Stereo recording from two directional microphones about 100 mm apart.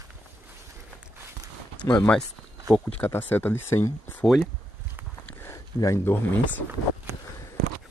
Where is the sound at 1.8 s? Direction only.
30° left (ahead or behind).